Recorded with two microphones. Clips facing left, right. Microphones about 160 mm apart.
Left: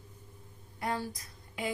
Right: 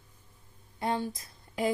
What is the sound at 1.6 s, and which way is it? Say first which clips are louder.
Speech: right 7 dB; 35° right (ahead or behind).